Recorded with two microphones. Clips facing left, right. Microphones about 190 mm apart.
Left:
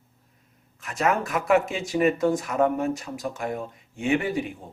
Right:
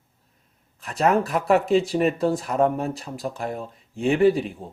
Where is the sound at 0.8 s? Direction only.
35° right (ahead or behind).